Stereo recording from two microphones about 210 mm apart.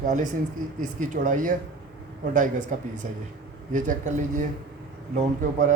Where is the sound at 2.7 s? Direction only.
35° right (ahead or behind).